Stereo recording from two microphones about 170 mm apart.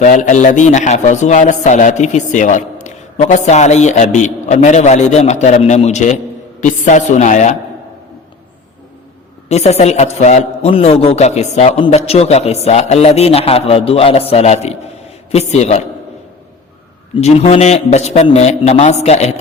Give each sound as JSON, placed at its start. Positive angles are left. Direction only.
{"t": 0.0, "sound": "speech", "side_deg": 45}
{"t": 9.5, "sound": "a man's voice", "side_deg": 40}
{"t": 17.2, "sound": "a man's voice", "side_deg": 40}